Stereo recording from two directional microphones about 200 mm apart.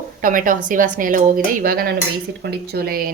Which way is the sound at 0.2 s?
45° right (ahead or behind).